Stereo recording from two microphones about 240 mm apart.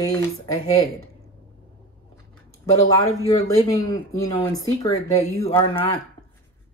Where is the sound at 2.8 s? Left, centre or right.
Centre.